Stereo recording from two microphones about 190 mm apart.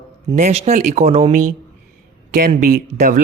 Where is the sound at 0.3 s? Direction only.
35° right (ahead or behind).